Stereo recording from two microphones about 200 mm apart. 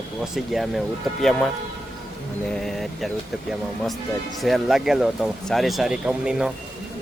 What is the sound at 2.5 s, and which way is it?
Speech, centre (ahead or behind).